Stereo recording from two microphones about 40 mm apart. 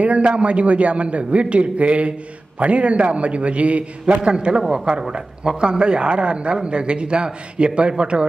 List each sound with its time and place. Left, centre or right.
0.0 s a man's voice: right